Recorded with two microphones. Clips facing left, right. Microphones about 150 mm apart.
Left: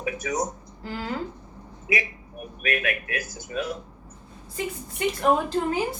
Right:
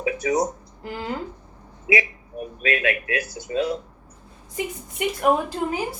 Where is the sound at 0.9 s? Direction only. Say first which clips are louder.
Right 1 dB; 20° right (ahead or behind).